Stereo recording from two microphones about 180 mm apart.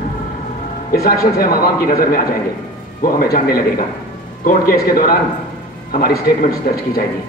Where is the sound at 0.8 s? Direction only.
55° left (ahead or behind).